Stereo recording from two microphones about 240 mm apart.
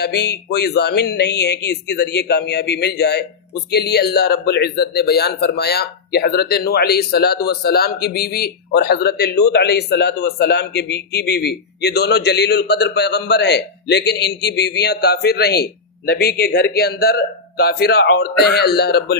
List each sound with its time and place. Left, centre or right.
0.0 s speech: left